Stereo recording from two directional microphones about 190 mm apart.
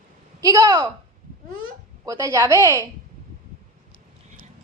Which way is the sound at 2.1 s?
15° right (ahead or behind).